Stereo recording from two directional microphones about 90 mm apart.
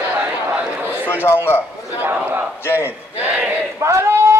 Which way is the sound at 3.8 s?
30° right (ahead or behind).